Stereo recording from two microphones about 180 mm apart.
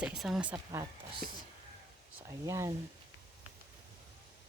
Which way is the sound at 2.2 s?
15° right (ahead or behind).